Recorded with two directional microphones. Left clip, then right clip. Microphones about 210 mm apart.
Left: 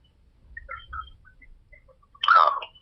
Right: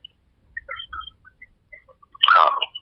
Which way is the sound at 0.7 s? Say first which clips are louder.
Right 2 dB; 30° right (ahead or behind).